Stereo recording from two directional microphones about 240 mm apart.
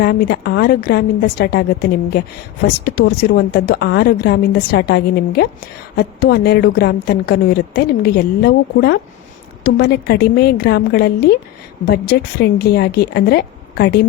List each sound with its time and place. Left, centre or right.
0.0 s speech: left